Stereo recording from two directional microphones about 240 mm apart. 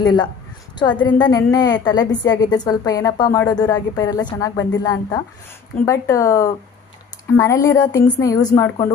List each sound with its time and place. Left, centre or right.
0.0 s a woman's voice: centre